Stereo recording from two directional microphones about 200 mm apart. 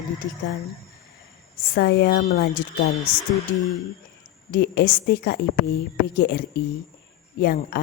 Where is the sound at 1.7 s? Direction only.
55° left (ahead or behind).